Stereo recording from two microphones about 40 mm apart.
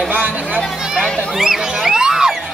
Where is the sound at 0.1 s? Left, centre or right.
Right.